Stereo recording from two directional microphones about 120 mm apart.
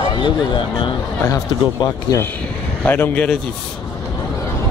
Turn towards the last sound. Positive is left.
turn(degrees=15)  # may be behind; listen again after turning